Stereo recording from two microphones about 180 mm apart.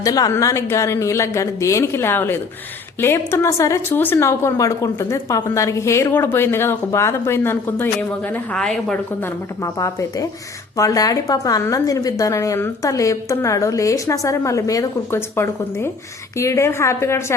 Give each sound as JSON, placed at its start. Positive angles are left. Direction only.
{"t": 0.0, "sound": "a woman's voice", "side_deg": 20}
{"t": 9.6, "sound": "a woman's voice", "side_deg": 20}